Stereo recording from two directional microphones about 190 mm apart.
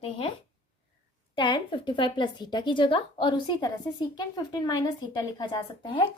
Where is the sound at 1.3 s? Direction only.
25° left (ahead or behind).